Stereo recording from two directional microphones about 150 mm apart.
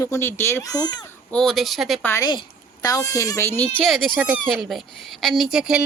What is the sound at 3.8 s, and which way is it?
Speech, centre (ahead or behind).